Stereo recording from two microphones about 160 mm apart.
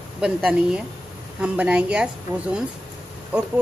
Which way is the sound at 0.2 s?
5° right (ahead or behind).